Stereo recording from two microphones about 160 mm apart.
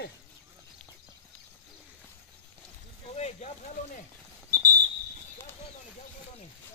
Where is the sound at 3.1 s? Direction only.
45° left (ahead or behind).